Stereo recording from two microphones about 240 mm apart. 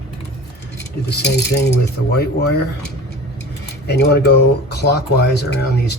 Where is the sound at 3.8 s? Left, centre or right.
Left.